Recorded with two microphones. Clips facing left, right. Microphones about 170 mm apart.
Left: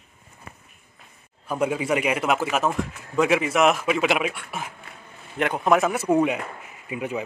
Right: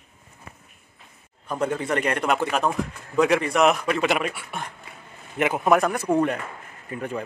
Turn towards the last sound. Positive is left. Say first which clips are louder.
# left 1 dB
turn(degrees=10)  # may be behind; listen again after turning